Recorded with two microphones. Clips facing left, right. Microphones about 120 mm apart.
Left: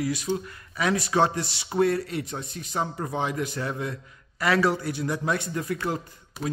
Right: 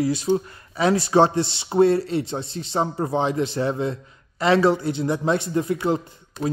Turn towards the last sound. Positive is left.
turn(degrees=0)  # may be behind; listen again after turning